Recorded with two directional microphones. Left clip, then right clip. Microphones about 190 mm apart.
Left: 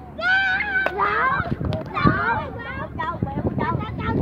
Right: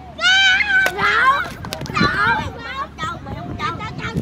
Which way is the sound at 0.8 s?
55° right (ahead or behind).